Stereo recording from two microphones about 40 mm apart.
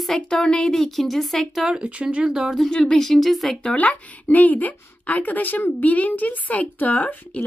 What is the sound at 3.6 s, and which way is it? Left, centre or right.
A woman's voice, left.